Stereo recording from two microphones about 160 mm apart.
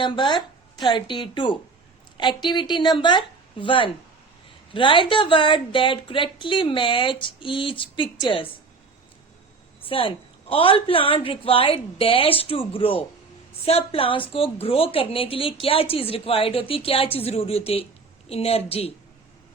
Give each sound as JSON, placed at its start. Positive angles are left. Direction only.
{"t": 0.0, "sound": "speech", "side_deg": 30}
{"t": 9.8, "sound": "speech", "side_deg": 35}